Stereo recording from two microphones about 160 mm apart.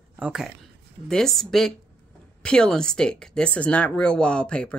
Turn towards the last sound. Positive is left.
turn(degrees=5)  # may be behind; listen again after turning